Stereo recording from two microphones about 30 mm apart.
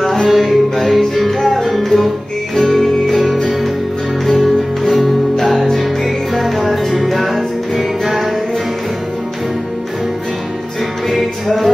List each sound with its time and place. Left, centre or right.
0.0 s music: centre
4.4 s music: centre
11.1 s music: centre